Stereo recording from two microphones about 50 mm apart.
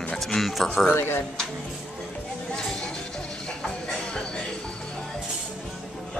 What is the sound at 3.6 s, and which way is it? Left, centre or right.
Music, centre.